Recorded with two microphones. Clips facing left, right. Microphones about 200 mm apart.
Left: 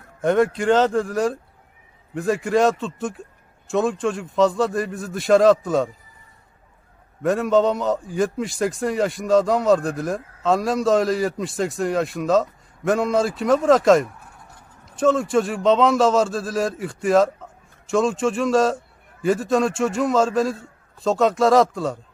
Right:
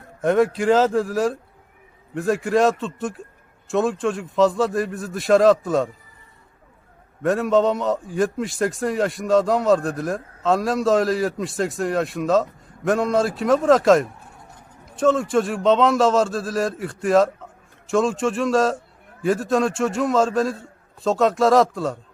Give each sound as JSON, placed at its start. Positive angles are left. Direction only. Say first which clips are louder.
{"t": 0.2, "sound": "a man's voice", "louder": "even", "side_deg": 0}
{"t": 7.2, "sound": "a man's voice", "louder": "even", "side_deg": 0}